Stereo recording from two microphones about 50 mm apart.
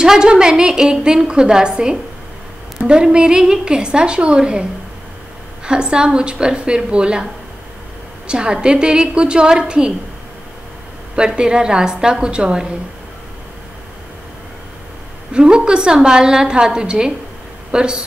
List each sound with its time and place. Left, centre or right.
0.0 s a woman's voice: centre
5.7 s a woman's voice: centre
8.3 s a woman's voice: centre
11.1 s a woman's voice: centre
15.3 s a woman's voice: centre